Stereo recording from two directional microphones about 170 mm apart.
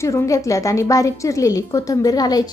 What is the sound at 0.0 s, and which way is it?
A woman's voice, 15° left (ahead or behind).